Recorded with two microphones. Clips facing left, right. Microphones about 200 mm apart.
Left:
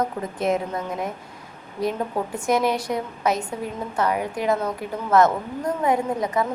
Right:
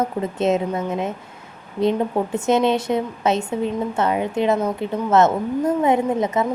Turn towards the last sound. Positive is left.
turn(degrees=-25)  # may be behind; listen again after turning